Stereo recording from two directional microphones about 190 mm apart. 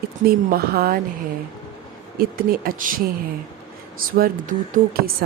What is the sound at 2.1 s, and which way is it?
Speech, 50° right (ahead or behind).